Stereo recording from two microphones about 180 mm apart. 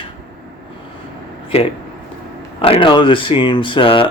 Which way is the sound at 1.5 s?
35° left (ahead or behind).